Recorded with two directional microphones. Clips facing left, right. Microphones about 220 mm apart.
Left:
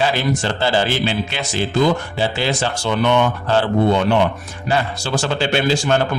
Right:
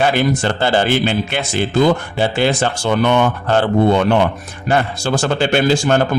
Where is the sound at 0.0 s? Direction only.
55° right (ahead or behind).